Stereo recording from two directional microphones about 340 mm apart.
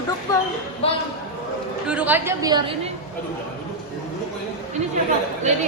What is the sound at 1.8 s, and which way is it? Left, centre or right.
Speech, centre.